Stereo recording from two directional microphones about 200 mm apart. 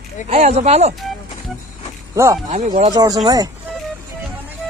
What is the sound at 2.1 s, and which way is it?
A man's voice, 15° right (ahead or behind).